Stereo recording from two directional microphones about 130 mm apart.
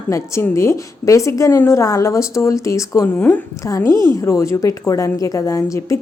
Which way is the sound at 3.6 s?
25° left (ahead or behind).